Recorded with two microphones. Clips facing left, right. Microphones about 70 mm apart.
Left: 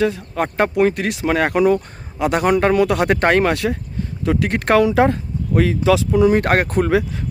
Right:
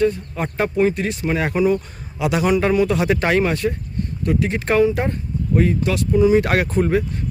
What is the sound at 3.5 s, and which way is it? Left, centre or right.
Speech, left.